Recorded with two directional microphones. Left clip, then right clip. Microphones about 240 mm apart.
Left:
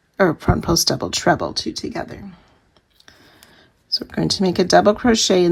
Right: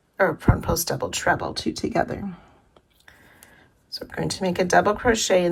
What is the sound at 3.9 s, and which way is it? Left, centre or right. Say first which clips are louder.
Speech: left 8 dB; left.